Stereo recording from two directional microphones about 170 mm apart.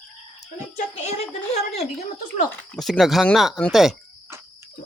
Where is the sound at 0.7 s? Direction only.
40° left (ahead or behind).